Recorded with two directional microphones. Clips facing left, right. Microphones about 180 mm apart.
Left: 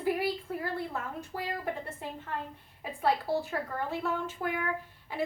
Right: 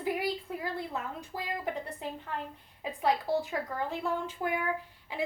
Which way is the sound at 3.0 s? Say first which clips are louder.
Even; 15° right (ahead or behind).